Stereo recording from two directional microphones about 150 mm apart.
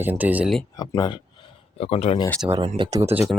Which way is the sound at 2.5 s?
40° right (ahead or behind).